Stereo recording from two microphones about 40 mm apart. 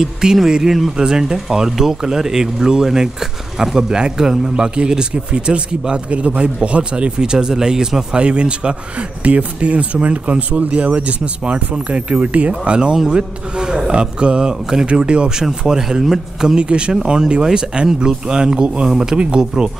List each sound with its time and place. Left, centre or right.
0.0 s speech: centre
8.2 s speech: right
14.5 s speech: centre
14.9 s speech: right
18.9 s speech: centre